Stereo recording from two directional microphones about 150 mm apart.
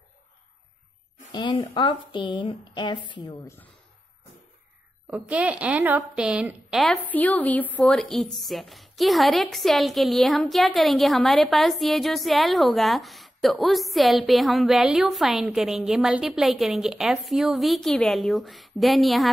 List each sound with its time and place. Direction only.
1.3 s a woman's voice: 30° left (ahead or behind)
5.1 s a woman's voice: 10° right (ahead or behind)
7.0 s a woman's voice: 10° left (ahead or behind)